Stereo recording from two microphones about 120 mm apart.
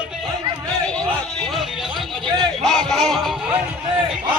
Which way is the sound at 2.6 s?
5° left (ahead or behind).